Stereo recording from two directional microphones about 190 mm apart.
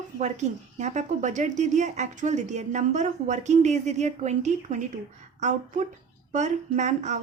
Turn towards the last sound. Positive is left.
turn(degrees=-40)  # may be behind; listen again after turning